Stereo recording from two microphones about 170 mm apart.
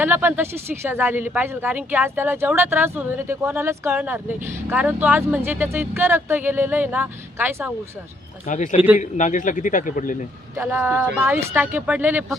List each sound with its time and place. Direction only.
0.0 s speech: 10° right (ahead or behind)
8.4 s speech: 45° left (ahead or behind)
10.6 s speech: 15° right (ahead or behind)